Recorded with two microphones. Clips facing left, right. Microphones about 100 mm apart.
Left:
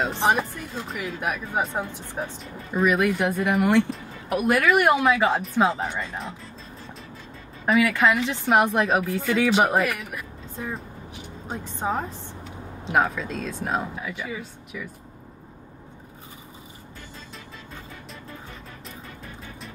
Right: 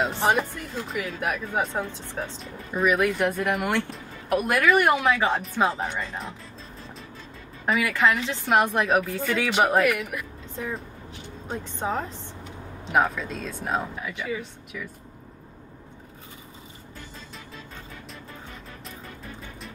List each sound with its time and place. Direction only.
0.2 s speech: 15° left (ahead or behind)
2.4 s speech: centre (ahead or behind)
7.6 s speech: 5° left (ahead or behind)
10.1 s vehicle: 15° left (ahead or behind)
11.5 s speech: 15° left (ahead or behind)
12.9 s speech: 5° left (ahead or behind)